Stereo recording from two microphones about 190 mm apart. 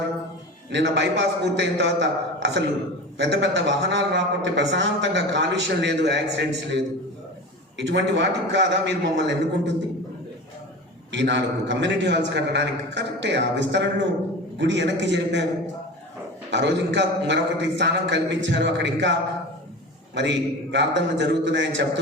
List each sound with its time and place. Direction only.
0.7 s a man's voice: 70° right (ahead or behind)
11.1 s a man's voice: 70° right (ahead or behind)
20.1 s a man's voice: 70° right (ahead or behind)